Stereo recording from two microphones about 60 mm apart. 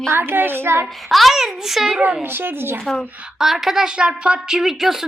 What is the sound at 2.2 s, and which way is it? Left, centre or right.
Speech, right.